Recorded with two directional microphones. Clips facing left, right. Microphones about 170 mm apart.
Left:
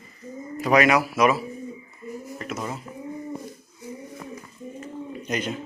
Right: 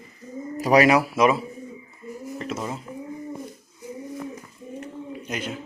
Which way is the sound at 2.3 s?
30° right (ahead or behind).